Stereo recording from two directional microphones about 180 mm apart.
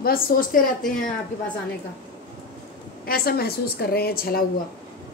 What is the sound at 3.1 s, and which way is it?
A woman's voice, 60° left (ahead or behind).